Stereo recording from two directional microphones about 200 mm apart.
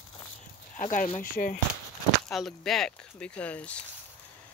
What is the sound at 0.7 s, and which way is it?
Speech, 40° left (ahead or behind).